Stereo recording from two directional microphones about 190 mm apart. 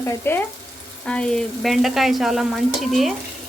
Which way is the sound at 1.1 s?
5° left (ahead or behind).